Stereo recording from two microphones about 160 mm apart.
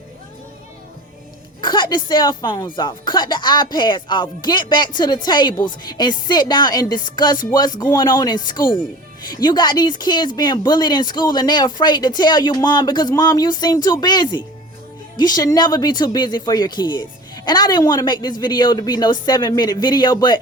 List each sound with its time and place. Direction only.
1.6 s speech: 30° left (ahead or behind)